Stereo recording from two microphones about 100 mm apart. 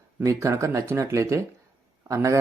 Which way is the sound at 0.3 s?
30° right (ahead or behind).